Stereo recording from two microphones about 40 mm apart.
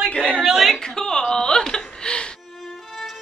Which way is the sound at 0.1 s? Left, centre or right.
Left.